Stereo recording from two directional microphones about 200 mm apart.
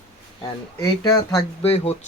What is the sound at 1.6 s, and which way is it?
Speech, 30° left (ahead or behind).